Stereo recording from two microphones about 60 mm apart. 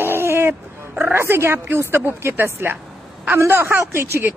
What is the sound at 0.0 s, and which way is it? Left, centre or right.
Dog, right.